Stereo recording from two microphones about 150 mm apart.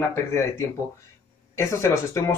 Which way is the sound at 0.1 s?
20° left (ahead or behind).